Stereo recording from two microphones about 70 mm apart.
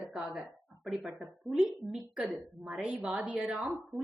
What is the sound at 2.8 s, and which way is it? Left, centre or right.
Speech, centre.